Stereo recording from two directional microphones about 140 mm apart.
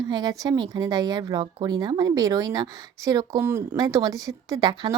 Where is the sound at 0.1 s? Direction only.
30° right (ahead or behind).